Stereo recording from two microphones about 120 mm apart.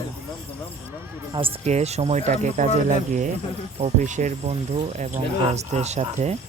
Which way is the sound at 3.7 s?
80° right.